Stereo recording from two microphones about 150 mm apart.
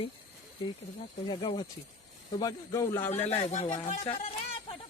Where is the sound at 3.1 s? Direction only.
45° left (ahead or behind).